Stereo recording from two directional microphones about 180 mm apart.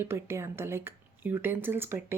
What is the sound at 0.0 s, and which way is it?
Speech, 15° right (ahead or behind).